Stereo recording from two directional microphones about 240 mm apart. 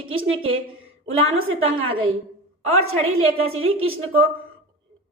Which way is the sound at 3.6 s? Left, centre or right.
Right.